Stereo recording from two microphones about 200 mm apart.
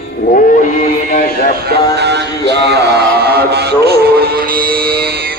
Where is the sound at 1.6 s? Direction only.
55° right (ahead or behind).